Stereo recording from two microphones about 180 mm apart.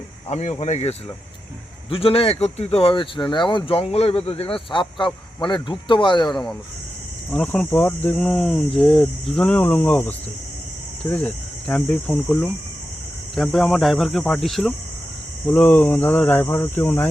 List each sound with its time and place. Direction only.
0.3 s speech: 40° left (ahead or behind)
6.3 s speech: 5° left (ahead or behind)